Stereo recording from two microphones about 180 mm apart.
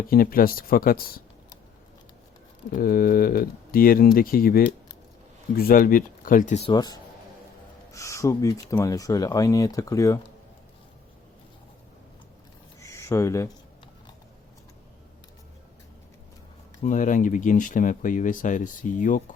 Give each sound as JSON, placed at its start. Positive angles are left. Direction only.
{"t": 0.1, "sound": "speech", "side_deg": 55}
{"t": 2.6, "sound": "speech", "side_deg": 55}
{"t": 6.7, "sound": "speech", "side_deg": 20}
{"t": 12.8, "sound": "a sound", "side_deg": 15}
{"t": 16.8, "sound": "speech", "side_deg": 45}